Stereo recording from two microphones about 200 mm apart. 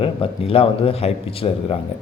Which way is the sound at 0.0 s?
30° left (ahead or behind).